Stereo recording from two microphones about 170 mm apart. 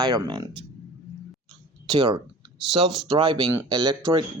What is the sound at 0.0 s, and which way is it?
Speech, 25° right (ahead or behind).